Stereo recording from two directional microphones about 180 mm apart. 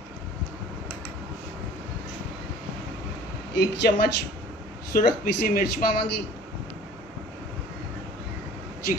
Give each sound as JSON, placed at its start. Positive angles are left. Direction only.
{"t": 3.5, "sound": "a woman's voice", "side_deg": 65}
{"t": 4.9, "sound": "speech", "side_deg": 55}